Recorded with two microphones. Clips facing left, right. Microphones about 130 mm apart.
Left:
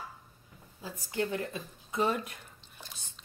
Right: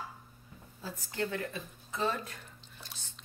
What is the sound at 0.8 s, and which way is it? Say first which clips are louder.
A woman's voice: left 3 dB; 20° left (ahead or behind).